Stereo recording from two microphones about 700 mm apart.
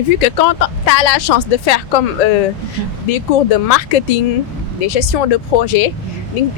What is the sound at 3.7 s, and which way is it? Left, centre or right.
Speech, left.